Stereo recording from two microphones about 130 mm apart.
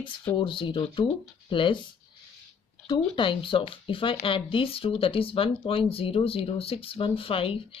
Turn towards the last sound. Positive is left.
turn(degrees=45)  # may be behind; listen again after turning